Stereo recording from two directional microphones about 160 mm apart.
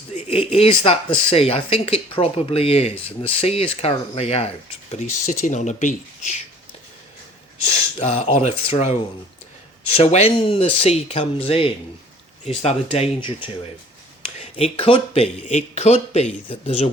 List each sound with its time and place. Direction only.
0.1 s speech: 40° left (ahead or behind)
7.9 s speech: 40° left (ahead or behind)
10.0 s speech: 40° left (ahead or behind)
14.6 s speech: 35° left (ahead or behind)